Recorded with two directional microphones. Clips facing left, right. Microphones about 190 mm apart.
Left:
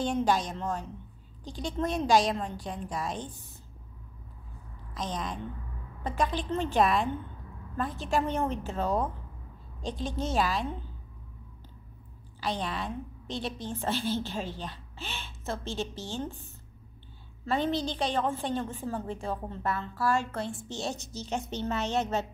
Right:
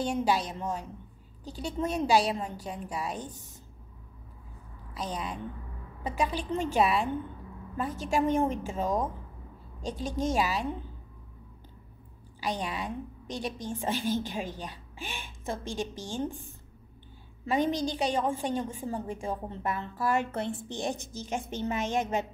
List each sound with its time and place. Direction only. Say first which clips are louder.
0.0 s a woman's voice: left 1 dB; 10° right (ahead or behind)
4.9 s a woman's voice: even; 10° right (ahead or behind)
12.4 s a woman's voice: even; 10° right (ahead or behind)
17.5 s a woman's voice: right 1 dB; 10° right (ahead or behind)
20.9 s a woman's voice: even; 55° right (ahead or behind)
21.6 s a woman's voice: even; 10° right (ahead or behind)